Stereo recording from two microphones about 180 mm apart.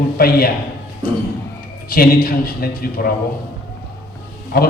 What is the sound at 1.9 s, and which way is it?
A man's voice, 55° left (ahead or behind).